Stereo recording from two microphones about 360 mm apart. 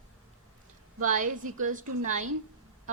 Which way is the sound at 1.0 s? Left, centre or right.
Right.